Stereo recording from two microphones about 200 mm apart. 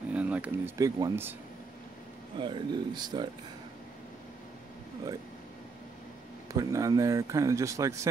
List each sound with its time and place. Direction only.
0.1 s speech: 5° right (ahead or behind)
2.3 s speech: 25° right (ahead or behind)
6.5 s speech: 15° right (ahead or behind)